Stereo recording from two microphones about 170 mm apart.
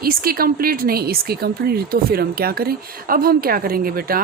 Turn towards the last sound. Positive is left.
turn(degrees=-60)  # may be behind; listen again after turning